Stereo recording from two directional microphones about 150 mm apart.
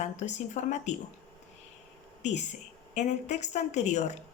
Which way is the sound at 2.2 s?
50° left (ahead or behind).